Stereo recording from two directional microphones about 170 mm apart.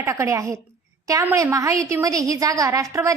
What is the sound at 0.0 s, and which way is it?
A woman's voice, 15° right (ahead or behind).